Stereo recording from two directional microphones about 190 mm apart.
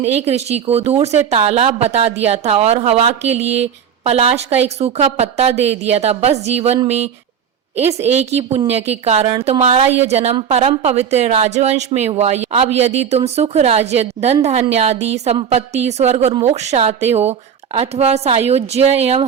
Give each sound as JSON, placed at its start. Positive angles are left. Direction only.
{"t": 0.1, "sound": "speech", "side_deg": -35}
{"t": 8.7, "sound": "speech", "side_deg": -35}